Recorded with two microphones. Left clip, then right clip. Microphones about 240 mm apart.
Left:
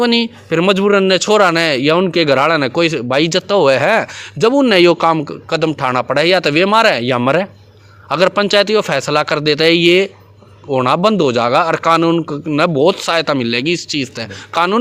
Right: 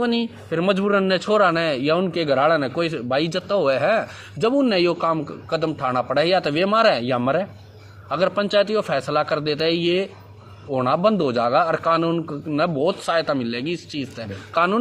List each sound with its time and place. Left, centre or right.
0.0 s speech: left